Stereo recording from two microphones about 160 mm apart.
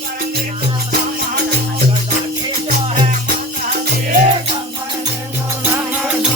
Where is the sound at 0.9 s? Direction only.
65° right (ahead or behind).